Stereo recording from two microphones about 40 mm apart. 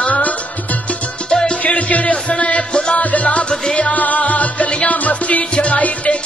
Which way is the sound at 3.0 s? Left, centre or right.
Left.